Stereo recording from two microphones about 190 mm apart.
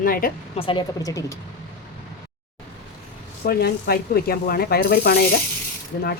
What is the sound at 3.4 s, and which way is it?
Speech, 55° left (ahead or behind).